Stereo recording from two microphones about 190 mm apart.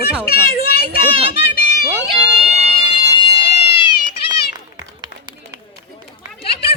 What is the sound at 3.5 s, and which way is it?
Cat, 30° left (ahead or behind).